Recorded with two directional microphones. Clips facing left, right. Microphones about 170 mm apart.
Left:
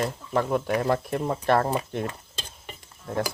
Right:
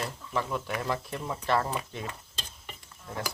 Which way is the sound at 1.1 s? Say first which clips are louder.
Left 6 dB; 50° left (ahead or behind).